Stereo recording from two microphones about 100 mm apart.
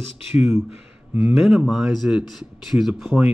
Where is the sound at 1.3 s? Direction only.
5° right (ahead or behind).